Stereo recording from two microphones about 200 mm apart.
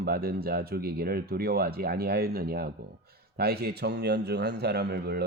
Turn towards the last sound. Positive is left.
turn(degrees=-55)  # may be behind; listen again after turning